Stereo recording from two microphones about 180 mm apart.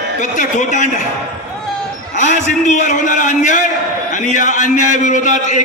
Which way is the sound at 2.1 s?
45° left (ahead or behind).